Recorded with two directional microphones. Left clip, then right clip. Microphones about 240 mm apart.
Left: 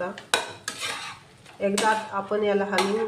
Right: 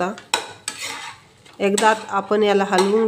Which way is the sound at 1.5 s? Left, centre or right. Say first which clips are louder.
Right 6 dB; right.